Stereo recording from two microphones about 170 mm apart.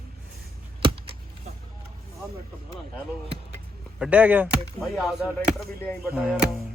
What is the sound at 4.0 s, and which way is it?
Speech, 10° right (ahead or behind).